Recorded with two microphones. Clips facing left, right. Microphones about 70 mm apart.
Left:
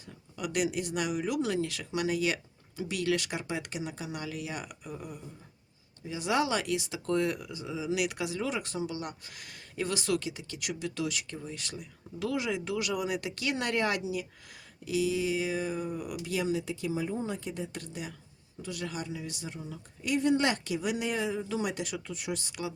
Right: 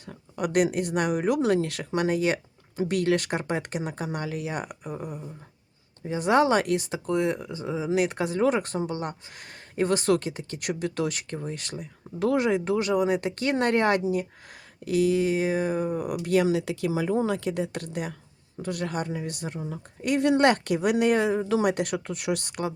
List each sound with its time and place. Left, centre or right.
0.0 s speech: right
7.0 s speech: centre; by 22.7 s right